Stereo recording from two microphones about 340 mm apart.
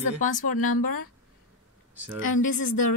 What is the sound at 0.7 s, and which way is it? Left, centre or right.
Speech, left.